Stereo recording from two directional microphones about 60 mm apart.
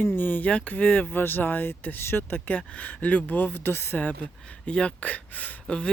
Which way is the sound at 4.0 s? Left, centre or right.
Left.